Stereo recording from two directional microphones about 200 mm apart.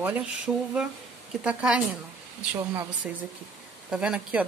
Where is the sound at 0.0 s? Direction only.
5° right (ahead or behind).